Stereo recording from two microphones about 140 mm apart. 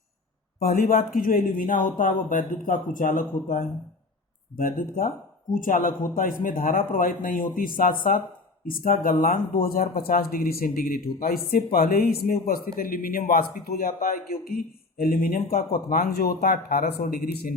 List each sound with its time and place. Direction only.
0.6 s speech: 90° left